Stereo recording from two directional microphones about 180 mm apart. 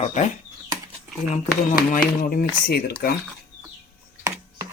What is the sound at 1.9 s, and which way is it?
Speech, 50° left (ahead or behind).